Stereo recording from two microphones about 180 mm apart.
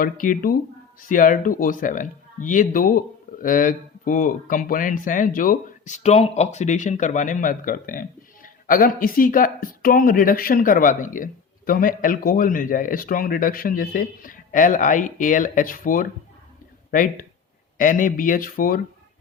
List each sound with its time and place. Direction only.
0.0 s speech: 50° left (ahead or behind)